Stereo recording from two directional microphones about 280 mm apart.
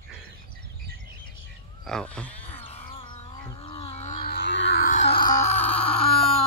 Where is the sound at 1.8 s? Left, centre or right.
Centre.